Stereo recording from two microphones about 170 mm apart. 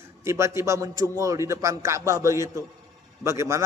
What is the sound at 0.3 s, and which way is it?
A man's voice, 15° right (ahead or behind).